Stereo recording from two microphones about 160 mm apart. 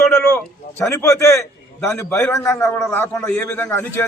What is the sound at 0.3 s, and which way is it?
A man's voice, 15° left (ahead or behind).